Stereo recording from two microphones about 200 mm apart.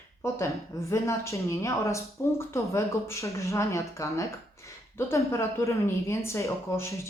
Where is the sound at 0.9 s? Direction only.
15° left (ahead or behind).